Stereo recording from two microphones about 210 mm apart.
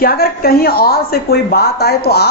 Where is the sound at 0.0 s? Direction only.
45° left (ahead or behind).